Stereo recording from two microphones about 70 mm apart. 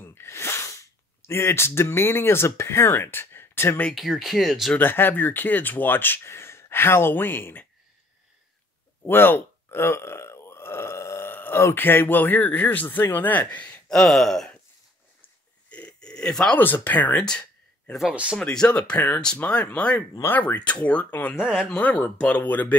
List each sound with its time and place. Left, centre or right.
0.0 s sneeze: left
1.2 s speech: left
3.9 s speech: centre
4.7 s speech: left
9.0 s speech: left
13.8 s speech: centre
15.2 s a sound: centre
16.5 s speech: left
17.2 s speech: centre
18.1 s speech: centre
18.4 s speech: centre
21.4 s speech: centre
21.6 s speech: left